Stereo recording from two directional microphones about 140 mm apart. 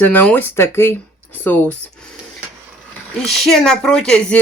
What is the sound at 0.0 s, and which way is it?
Speech, 15° left (ahead or behind).